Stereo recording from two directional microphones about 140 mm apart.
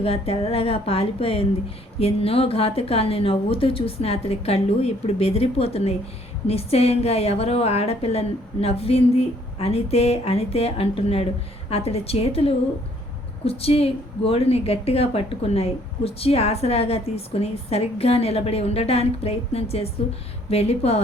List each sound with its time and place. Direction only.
0.0 s a woman's voice: 45° left (ahead or behind)